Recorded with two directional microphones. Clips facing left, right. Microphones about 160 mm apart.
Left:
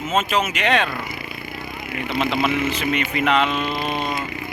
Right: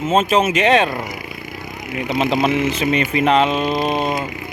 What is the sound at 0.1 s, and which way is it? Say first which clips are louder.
Speech: right 6 dB; 30° right (ahead or behind).